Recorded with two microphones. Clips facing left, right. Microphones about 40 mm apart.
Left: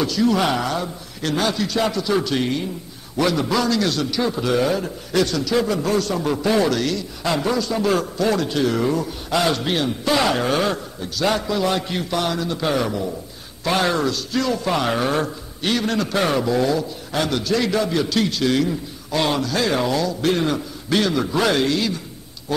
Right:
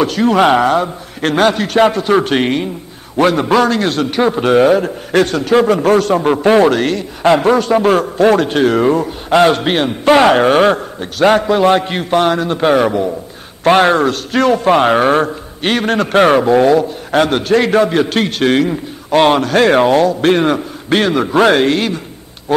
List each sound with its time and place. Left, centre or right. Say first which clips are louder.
0.0 s a man's voice: right 8 dB; right